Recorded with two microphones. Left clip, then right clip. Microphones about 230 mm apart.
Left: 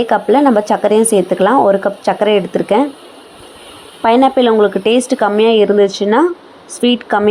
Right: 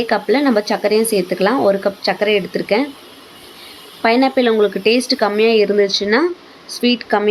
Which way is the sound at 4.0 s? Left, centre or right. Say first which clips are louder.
Left 4 dB; centre.